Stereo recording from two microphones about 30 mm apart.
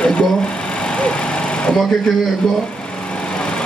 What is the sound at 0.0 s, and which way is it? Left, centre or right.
Sewing machine, left.